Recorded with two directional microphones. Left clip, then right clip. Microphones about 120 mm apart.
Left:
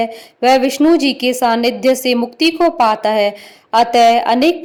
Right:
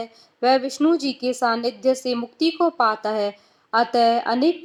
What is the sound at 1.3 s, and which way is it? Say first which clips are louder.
Speech: left 6 dB; 50° left (ahead or behind).